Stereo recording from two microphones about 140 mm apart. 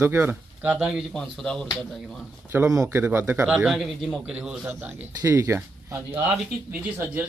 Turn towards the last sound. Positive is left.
turn(degrees=-10)  # may be behind; listen again after turning